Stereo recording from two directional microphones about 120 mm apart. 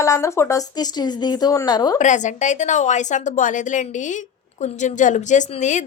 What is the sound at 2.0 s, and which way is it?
A woman's voice, 90° left.